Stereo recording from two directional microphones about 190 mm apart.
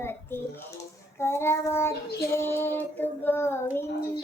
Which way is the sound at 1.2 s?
15° left (ahead or behind).